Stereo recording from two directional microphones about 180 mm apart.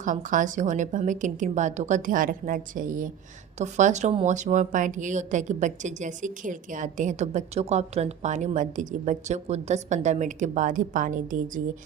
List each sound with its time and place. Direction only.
0.0 s a woman's voice: 45° right (ahead or behind)